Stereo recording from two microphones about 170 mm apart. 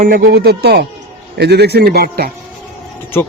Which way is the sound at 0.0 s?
60° right (ahead or behind).